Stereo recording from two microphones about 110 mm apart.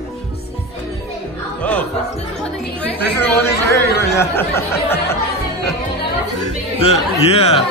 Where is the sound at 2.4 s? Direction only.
15° left (ahead or behind).